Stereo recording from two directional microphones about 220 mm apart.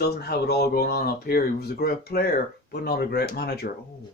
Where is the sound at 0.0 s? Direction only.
45° left (ahead or behind).